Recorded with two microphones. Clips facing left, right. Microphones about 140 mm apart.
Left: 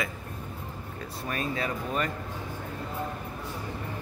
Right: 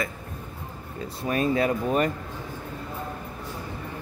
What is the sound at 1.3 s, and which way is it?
Speech, 40° right (ahead or behind).